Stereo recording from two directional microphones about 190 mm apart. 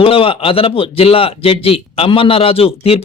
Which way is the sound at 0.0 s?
30° left (ahead or behind).